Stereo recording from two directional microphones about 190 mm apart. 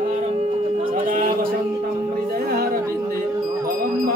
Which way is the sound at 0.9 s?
45° right (ahead or behind).